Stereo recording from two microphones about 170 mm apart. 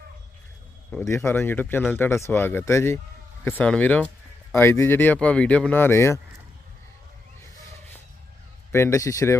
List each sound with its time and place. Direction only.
0.9 s speech: 15° left (ahead or behind)
8.7 s speech: 15° left (ahead or behind)